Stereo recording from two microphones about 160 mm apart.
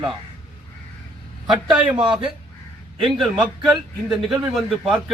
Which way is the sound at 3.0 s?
Centre (ahead or behind).